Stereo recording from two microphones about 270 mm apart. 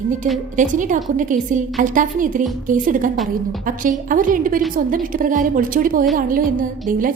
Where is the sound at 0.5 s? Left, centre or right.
Right.